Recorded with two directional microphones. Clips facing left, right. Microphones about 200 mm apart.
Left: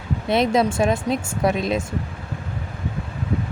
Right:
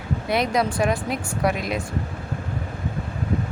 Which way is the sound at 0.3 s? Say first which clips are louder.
Left 4 dB; 25° left (ahead or behind).